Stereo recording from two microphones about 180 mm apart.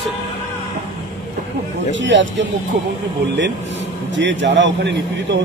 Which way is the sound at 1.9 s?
90° right.